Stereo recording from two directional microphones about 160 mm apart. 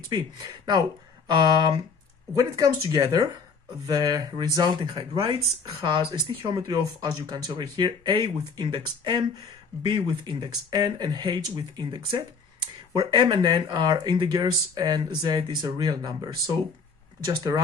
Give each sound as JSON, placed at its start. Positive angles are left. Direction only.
{"t": 0.1, "sound": "speech", "side_deg": -25}